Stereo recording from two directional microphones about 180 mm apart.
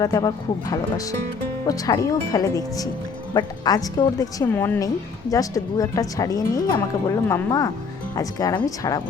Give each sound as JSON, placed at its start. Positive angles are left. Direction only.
{"t": 0.0, "sound": "a woman's voice", "side_deg": 20}